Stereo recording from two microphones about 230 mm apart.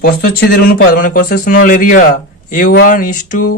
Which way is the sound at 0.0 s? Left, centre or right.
Left.